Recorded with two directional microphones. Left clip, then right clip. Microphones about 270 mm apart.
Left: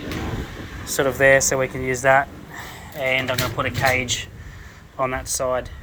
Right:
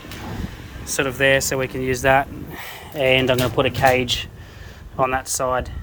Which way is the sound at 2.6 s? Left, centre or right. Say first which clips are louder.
Right 5 dB; right.